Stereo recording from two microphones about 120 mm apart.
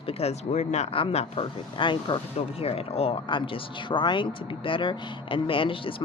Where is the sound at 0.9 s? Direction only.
55° left (ahead or behind).